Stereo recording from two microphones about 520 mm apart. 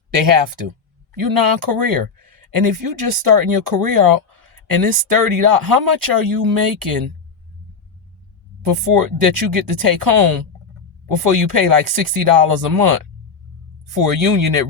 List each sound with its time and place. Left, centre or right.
0.1 s speech: right
8.6 s speech: right